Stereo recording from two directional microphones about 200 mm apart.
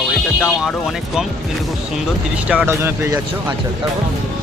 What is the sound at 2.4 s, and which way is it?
Speech, 10° right (ahead or behind).